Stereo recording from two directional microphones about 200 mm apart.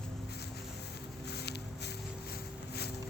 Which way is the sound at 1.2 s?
55° left (ahead or behind).